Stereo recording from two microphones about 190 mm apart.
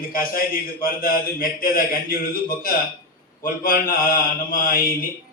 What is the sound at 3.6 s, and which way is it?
A man's voice, 50° left (ahead or behind).